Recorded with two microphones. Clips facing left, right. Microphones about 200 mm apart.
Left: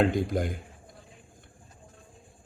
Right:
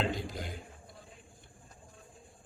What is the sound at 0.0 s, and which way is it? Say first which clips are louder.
Speech: left 10 dB; 50° left (ahead or behind).